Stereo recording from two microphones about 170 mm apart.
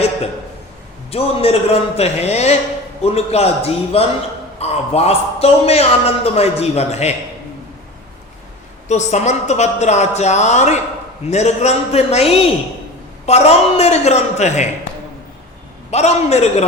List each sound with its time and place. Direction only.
1.1 s a man's voice: 35° left (ahead or behind)
8.9 s a woman's voice: 45° left (ahead or behind)
15.9 s a man's voice: 40° left (ahead or behind)